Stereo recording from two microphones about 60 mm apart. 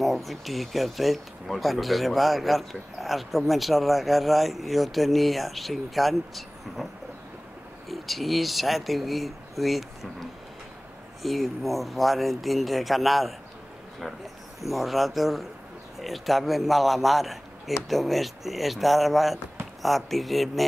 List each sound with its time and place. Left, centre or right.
0.0 s speech: centre
7.9 s speech: centre
11.2 s speech: centre